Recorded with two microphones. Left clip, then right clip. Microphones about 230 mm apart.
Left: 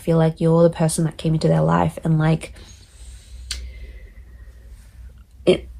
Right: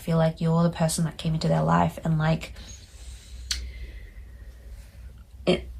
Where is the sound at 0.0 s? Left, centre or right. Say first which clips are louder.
Left 7 dB; left.